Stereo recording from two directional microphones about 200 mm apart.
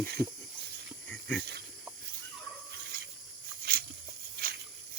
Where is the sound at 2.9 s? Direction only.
45° right (ahead or behind).